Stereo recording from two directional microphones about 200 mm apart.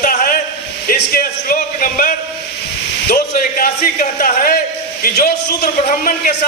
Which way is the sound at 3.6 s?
40° left (ahead or behind).